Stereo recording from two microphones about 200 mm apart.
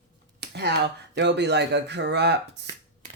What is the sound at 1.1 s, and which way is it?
Speech, 60° right (ahead or behind).